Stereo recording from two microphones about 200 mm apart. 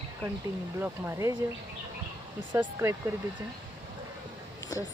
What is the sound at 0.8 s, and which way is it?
Speech, 15° right (ahead or behind).